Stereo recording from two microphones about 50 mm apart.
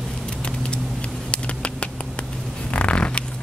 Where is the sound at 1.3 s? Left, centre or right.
Left.